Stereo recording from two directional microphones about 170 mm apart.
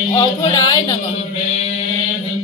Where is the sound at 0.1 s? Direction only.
20° left (ahead or behind).